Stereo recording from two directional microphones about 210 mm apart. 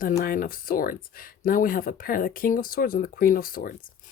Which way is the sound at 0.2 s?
45° left (ahead or behind).